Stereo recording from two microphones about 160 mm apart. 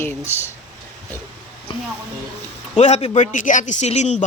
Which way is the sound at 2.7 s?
45° left (ahead or behind).